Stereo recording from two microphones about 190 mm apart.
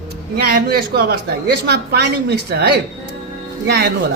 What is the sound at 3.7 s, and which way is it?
Speech, 60° right (ahead or behind).